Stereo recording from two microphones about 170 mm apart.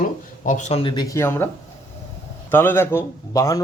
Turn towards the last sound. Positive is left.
turn(degrees=20)  # may be behind; listen again after turning